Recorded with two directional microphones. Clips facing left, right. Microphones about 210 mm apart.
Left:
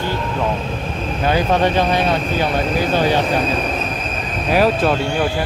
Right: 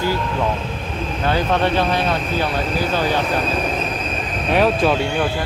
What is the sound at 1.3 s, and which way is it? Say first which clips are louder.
Speech: left 2 dB; 15° left (ahead or behind).